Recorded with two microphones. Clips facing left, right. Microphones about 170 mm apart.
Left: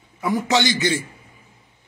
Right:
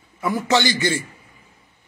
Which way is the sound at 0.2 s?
15° left (ahead or behind).